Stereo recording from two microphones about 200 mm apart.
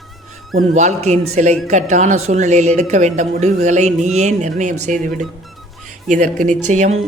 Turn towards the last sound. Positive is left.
turn(degrees=-35)  # may be behind; listen again after turning